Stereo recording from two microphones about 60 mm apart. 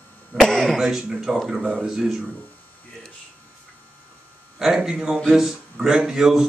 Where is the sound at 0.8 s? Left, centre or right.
Centre.